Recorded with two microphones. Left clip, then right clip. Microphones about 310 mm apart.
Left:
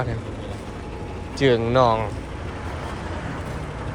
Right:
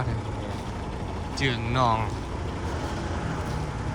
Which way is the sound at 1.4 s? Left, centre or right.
Centre.